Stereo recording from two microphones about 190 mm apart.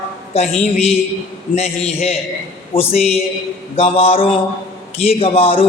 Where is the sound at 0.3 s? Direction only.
35° left (ahead or behind).